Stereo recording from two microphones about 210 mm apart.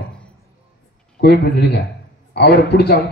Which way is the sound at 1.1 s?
50° left (ahead or behind).